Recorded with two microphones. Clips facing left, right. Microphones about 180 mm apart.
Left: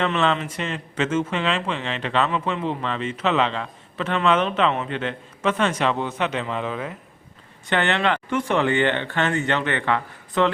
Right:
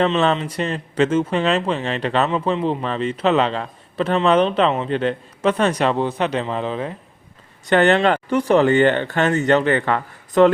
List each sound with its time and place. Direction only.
0.3 s speech: 35° right (ahead or behind)
2.3 s speech: 30° right (ahead or behind)